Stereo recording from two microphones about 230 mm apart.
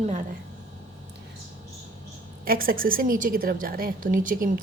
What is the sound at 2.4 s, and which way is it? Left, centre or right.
A woman's voice, right.